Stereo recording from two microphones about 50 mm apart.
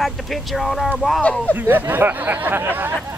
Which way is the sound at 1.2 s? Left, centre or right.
Centre.